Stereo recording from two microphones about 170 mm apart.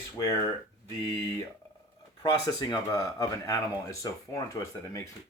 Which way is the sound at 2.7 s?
20° left (ahead or behind).